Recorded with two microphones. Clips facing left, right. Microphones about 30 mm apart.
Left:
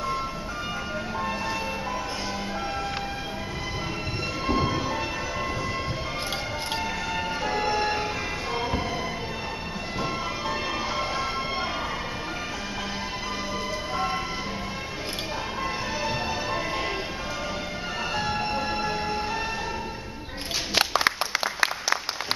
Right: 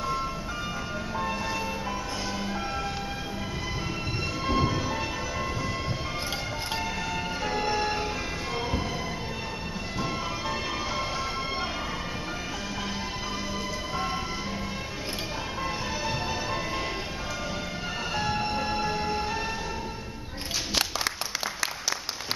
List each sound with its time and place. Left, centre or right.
4.5 s train: centre
7.4 s vehicle: centre
13.9 s vehicle: centre
15.6 s music: centre
18.1 s train: centre
20.7 s a sound: left